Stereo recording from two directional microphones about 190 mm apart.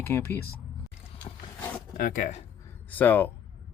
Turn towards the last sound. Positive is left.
turn(degrees=10)  # may be behind; listen again after turning